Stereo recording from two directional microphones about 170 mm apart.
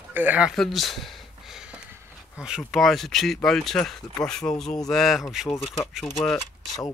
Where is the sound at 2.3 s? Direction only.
5° right (ahead or behind).